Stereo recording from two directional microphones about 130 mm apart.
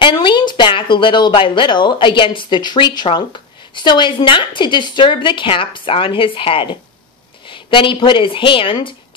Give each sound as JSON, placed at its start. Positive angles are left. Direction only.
{"t": 0.0, "sound": "a woman's voice", "side_deg": 35}